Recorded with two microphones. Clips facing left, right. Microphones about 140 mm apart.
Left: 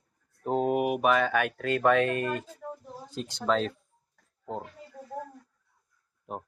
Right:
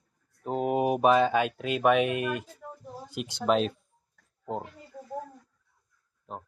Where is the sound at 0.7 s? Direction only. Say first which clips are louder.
Right 4 dB; 25° right (ahead or behind).